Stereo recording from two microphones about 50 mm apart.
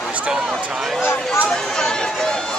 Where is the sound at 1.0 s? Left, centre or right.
Left.